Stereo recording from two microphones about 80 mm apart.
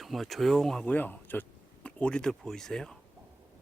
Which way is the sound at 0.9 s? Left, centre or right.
Left.